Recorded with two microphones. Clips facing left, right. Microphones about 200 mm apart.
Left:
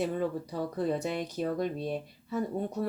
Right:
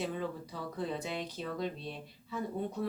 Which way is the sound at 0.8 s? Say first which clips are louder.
Left 6 dB; 45° left (ahead or behind).